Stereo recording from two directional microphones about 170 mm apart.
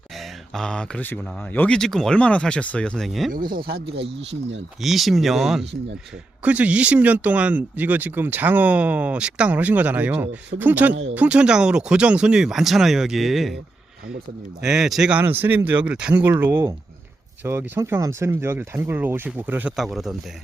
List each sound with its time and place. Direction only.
0.2 s speech: 5° left (ahead or behind)
3.3 s speech: 60° right (ahead or behind)
4.8 s speech: centre (ahead or behind)
14.6 s speech: 5° right (ahead or behind)